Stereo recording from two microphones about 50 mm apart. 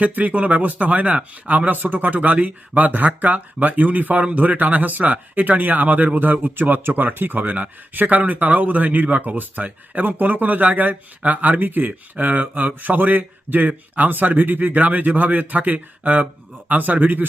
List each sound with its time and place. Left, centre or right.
0.2 s speech: right